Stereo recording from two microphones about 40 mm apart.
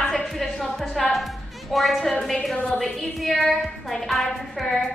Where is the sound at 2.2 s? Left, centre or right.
Centre.